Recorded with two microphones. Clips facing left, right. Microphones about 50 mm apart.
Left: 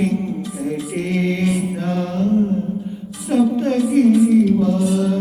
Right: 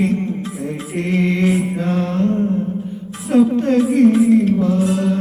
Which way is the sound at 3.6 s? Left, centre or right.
Right.